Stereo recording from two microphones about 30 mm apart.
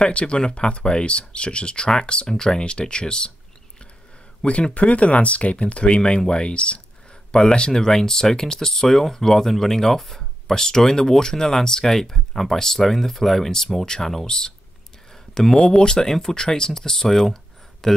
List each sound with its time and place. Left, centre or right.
0.1 s speech: left; by 2.6 s centre
2.8 s speech: left
4.4 s speech: left
4.7 s speech: left
7.7 s speech: centre
15.5 s speech: left